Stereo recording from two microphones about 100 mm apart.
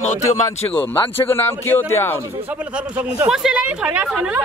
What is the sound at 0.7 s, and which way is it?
Speech, 20° left (ahead or behind).